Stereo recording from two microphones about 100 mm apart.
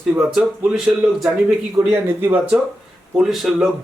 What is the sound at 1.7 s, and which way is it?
Speech, 25° right (ahead or behind).